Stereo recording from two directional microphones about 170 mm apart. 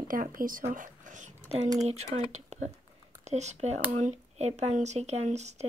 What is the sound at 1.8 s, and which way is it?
Speech, 40° right (ahead or behind).